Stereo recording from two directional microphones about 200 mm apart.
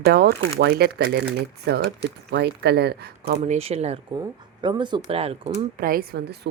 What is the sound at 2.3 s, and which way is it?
A woman's voice, 55° right (ahead or behind).